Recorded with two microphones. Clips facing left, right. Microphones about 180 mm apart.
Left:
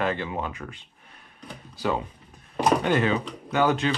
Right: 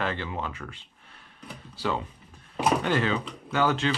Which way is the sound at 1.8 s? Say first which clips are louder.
Left 3 dB; 15° left (ahead or behind).